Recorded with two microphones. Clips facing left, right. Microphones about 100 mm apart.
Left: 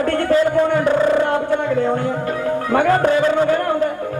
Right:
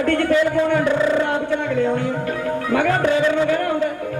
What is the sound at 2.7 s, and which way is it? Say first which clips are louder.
Speech: left 3 dB; 40° left (ahead or behind).